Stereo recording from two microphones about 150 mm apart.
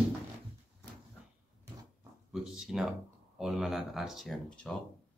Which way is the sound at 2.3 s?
5° right (ahead or behind).